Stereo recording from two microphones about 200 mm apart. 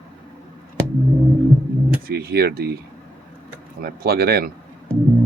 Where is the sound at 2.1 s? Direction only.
50° right (ahead or behind).